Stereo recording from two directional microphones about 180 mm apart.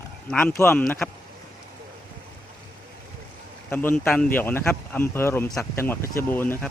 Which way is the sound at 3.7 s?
10° left (ahead or behind).